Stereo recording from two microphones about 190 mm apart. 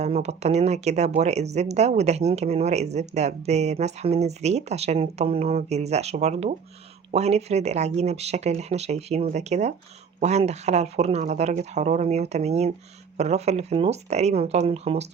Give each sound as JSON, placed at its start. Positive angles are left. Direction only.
{"t": 0.0, "sound": "speech", "side_deg": -35}